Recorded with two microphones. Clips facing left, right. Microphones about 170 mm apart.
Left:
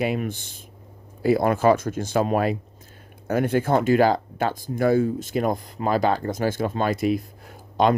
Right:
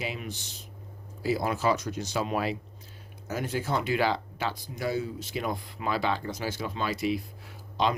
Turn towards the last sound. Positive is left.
turn(degrees=50)  # may be behind; listen again after turning